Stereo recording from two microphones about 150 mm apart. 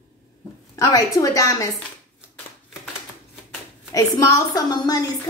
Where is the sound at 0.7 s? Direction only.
20° left (ahead or behind).